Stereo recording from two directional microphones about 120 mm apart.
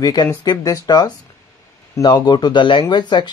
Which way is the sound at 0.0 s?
30° left (ahead or behind).